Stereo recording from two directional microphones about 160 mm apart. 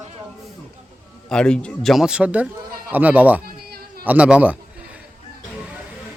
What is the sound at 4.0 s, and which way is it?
Speech, 10° right (ahead or behind).